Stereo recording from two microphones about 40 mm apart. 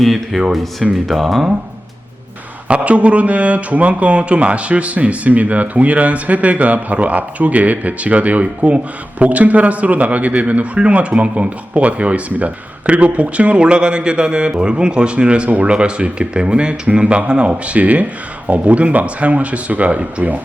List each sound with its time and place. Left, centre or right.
0.0 s speech: centre
2.6 s speech: right